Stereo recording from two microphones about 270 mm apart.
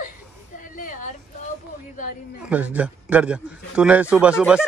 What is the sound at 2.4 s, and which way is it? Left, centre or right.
A man's voice, centre.